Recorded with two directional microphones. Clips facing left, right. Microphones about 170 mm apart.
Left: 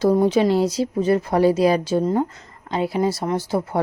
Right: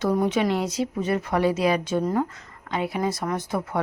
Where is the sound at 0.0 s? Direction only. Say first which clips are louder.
Left 6 dB; 30° left (ahead or behind).